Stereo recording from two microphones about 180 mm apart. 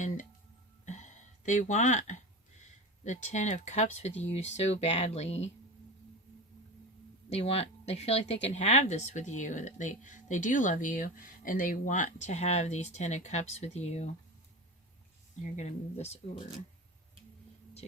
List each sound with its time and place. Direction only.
0.9 s a sound: 40° left (ahead or behind)
2.6 s speech: 40° left (ahead or behind)
7.3 s speech: 35° left (ahead or behind)
15.5 s speech: 35° left (ahead or behind)